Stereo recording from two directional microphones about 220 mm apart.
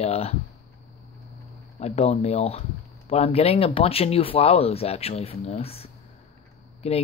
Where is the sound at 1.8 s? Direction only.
30° left (ahead or behind).